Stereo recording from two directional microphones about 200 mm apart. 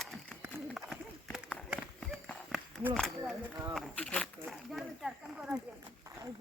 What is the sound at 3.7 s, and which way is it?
Speech, 5° left (ahead or behind).